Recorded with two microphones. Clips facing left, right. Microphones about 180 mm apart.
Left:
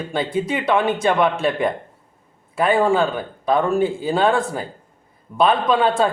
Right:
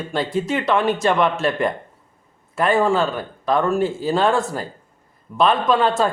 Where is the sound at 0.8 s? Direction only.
25° left (ahead or behind).